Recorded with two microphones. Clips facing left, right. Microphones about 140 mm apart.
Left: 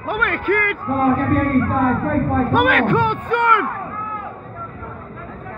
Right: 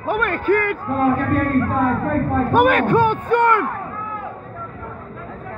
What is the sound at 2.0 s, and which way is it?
A man's voice, 35° right (ahead or behind).